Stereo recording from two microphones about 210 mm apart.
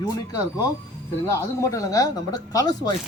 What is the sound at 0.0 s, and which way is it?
Speech, 15° left (ahead or behind).